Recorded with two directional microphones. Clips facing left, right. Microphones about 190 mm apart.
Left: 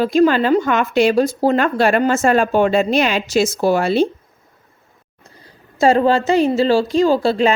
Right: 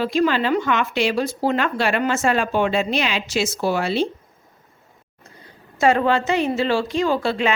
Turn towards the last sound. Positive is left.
turn(degrees=35)  # may be behind; listen again after turning